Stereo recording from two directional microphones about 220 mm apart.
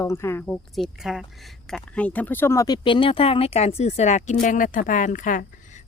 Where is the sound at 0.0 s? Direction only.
10° left (ahead or behind).